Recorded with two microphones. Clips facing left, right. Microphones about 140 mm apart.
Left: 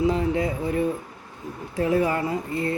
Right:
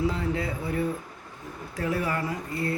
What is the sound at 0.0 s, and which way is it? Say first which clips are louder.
Speech: left 5 dB; 20° left (ahead or behind).